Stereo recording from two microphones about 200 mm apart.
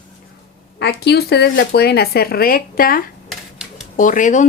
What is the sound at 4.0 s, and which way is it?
Speech, 40° left (ahead or behind).